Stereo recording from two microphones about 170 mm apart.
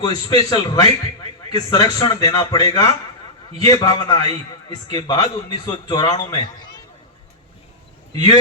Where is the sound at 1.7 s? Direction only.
20° left (ahead or behind).